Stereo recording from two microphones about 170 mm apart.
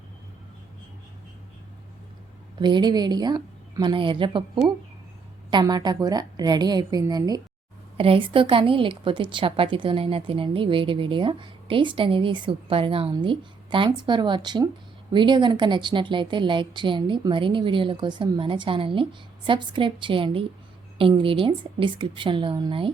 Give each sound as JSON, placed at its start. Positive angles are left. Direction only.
{"t": 2.6, "sound": "a woman's voice", "side_deg": -25}
{"t": 7.9, "sound": "a woman's voice", "side_deg": -30}